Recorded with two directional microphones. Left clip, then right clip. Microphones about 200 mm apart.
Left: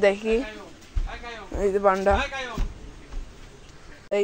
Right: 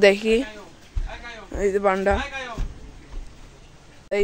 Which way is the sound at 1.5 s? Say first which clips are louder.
Even; 20° right (ahead or behind).